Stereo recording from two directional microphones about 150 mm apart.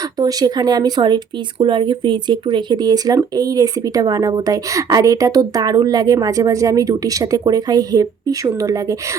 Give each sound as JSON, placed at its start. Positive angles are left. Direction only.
{"t": 0.2, "sound": "a woman's voice", "side_deg": -25}